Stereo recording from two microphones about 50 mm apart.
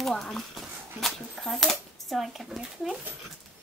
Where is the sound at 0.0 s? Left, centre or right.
Centre.